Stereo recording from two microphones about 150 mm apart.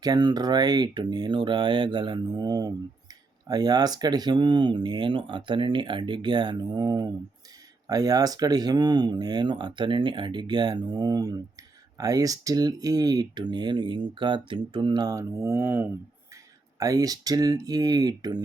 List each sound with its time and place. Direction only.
0.0 s speech: 25° right (ahead or behind)